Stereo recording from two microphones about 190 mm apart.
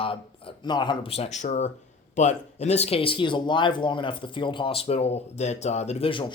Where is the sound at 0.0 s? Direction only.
30° left (ahead or behind).